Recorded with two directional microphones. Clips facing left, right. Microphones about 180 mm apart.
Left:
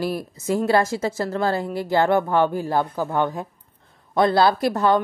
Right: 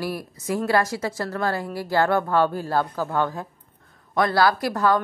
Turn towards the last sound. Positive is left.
turn(degrees=25)  # may be behind; listen again after turning